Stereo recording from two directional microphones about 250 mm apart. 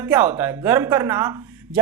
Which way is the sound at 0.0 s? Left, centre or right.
Centre.